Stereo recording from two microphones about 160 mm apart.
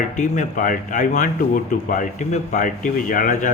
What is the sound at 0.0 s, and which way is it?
Speech, 50° left (ahead or behind).